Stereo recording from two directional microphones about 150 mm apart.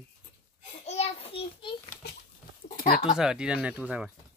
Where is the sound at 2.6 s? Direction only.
75° left (ahead or behind).